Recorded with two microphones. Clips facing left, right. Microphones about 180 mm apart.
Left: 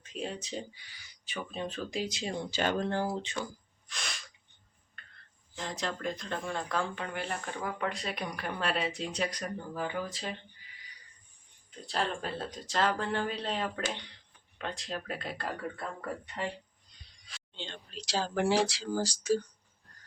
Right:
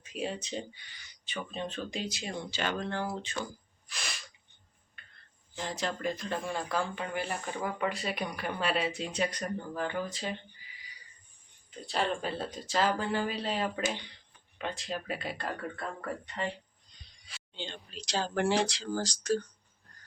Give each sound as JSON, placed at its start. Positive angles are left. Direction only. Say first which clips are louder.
{"t": 0.0, "sound": "speech", "louder": "right 2 dB", "side_deg": -5}
{"t": 2.0, "sound": "speech", "louder": "left 2 dB", "side_deg": 25}
{"t": 2.5, "sound": "speech", "louder": "left 4 dB", "side_deg": 45}
{"t": 3.8, "sound": "sneeze", "louder": "even", "side_deg": -5}
{"t": 5.5, "sound": "speech", "louder": "right 1 dB", "side_deg": 0}
{"t": 11.9, "sound": "speech", "louder": "right 2 dB", "side_deg": 0}